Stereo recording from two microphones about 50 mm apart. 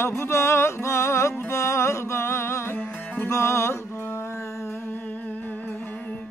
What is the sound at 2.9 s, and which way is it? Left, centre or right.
Music, left.